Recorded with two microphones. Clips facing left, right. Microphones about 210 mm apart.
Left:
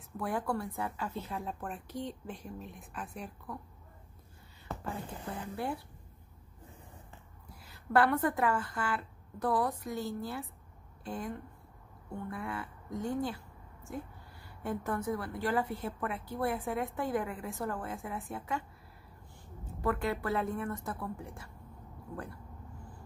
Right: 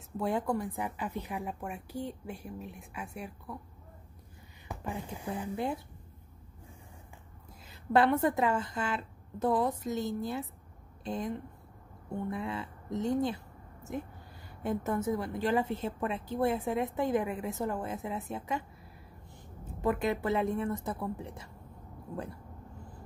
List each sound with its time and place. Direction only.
0.2 s a woman's voice: 20° right (ahead or behind)
4.6 s a sound: 15° right (ahead or behind)
5.2 s a woman's voice: 15° right (ahead or behind)
7.6 s a woman's voice: 20° right (ahead or behind)
14.6 s a woman's voice: 20° right (ahead or behind)
19.8 s a woman's voice: 20° right (ahead or behind)